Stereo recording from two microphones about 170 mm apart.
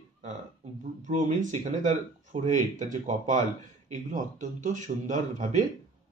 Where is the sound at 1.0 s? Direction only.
45° right (ahead or behind).